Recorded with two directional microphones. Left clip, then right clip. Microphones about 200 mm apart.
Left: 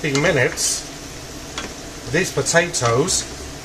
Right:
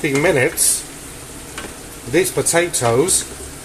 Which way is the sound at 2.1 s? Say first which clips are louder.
Right 2 dB; 35° right (ahead or behind).